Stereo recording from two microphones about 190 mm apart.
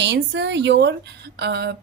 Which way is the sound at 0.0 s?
65° right (ahead or behind).